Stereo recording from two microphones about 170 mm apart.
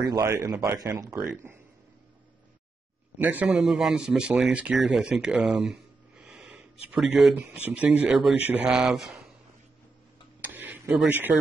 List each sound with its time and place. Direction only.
0.0 s speech: 20° right (ahead or behind)
3.2 s speech: 10° right (ahead or behind)
10.4 s tick-tock: 10° right (ahead or behind)